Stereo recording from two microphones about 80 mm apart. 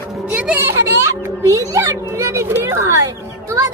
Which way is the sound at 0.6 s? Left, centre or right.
Right.